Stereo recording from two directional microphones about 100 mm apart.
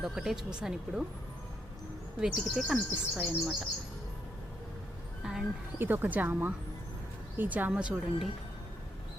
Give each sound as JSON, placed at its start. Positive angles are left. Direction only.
{"t": 0.0, "sound": "speech", "side_deg": -5}
{"t": 2.2, "sound": "a woman's voice", "side_deg": -5}
{"t": 5.2, "sound": "music", "side_deg": -5}
{"t": 5.8, "sound": "a woman's voice", "side_deg": -20}